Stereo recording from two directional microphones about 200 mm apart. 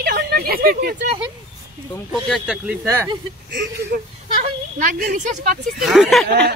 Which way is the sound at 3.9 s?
55° right (ahead or behind).